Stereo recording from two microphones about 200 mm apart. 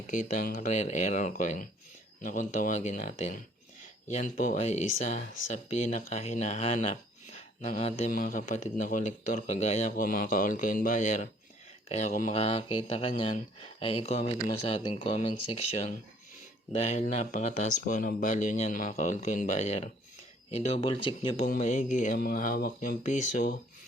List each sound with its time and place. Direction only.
0.1 s speech: 40° left (ahead or behind)
21.4 s speech: 40° left (ahead or behind)